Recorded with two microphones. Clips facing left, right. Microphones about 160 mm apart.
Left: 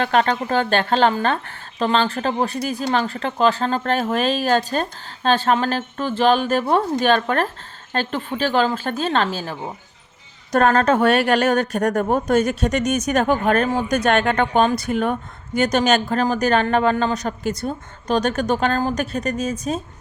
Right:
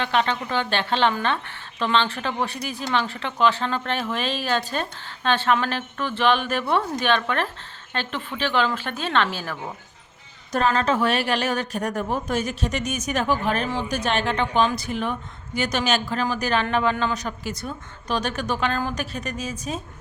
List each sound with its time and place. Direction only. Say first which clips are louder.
0.0 s a woman's voice: left 5 dB; 40° left (ahead or behind); by 9.7 s 25° left (ahead or behind)
10.5 s a woman's voice: left 5 dB; 55° left (ahead or behind); by 19.8 s 40° left (ahead or behind)